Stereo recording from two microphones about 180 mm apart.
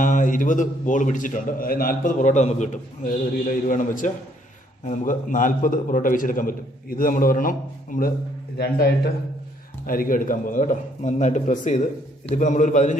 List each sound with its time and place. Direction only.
0.0 s a man's voice: 45° left (ahead or behind)
8.5 s a man's voice: 60° left (ahead or behind)
9.8 s a man's voice: 50° left (ahead or behind)